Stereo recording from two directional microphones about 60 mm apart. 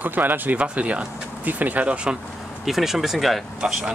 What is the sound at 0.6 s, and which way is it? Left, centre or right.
Speech, centre.